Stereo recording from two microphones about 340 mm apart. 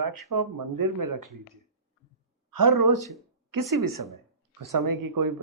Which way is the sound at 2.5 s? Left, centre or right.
Right.